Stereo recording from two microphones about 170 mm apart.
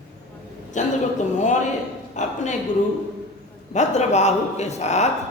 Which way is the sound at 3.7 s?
40° left (ahead or behind).